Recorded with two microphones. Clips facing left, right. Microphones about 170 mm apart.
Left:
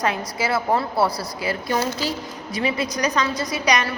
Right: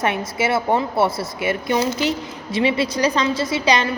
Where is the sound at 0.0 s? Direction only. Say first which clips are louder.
Right 3 dB; 25° right (ahead or behind).